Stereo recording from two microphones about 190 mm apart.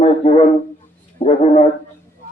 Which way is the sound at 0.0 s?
30° left (ahead or behind).